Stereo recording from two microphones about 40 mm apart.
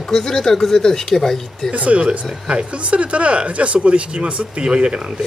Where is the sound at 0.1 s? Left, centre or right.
Centre.